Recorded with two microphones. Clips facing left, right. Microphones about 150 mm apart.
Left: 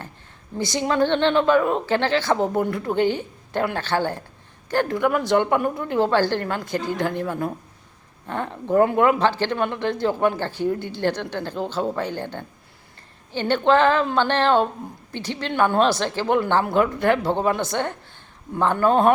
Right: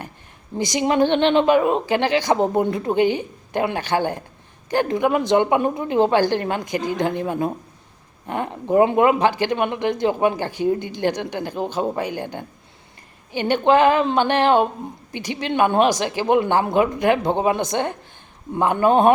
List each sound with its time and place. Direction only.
0.5 s a woman's voice: 15° right (ahead or behind)